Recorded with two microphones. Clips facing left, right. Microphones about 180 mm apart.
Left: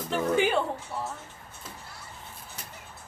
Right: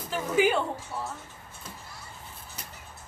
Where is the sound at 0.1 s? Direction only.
Centre (ahead or behind).